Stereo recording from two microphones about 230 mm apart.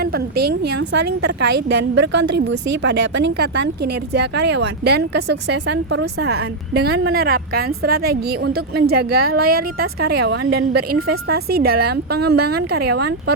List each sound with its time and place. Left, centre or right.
0.6 s a woman's voice: right